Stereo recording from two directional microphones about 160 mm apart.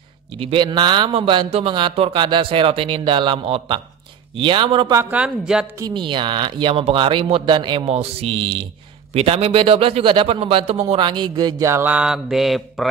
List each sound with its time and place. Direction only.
0.4 s a man's voice: 30° right (ahead or behind)
5.1 s speech: 5° right (ahead or behind)
5.8 s a man's voice: 25° right (ahead or behind); by 12.8 s centre (ahead or behind)